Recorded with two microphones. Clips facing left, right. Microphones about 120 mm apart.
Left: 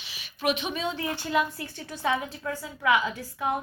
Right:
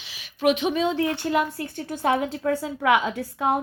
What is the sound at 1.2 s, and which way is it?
A woman's voice, 55° right (ahead or behind).